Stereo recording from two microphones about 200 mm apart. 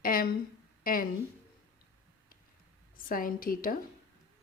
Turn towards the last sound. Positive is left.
turn(degrees=45)  # may be behind; listen again after turning